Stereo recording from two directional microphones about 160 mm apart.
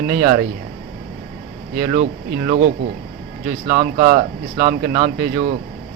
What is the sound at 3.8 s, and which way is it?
Speech, 55° right (ahead or behind).